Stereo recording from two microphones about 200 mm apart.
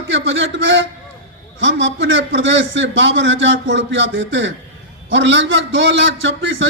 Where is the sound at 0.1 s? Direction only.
65° right (ahead or behind).